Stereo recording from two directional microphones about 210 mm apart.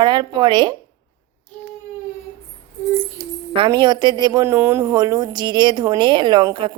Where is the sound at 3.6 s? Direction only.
20° right (ahead or behind).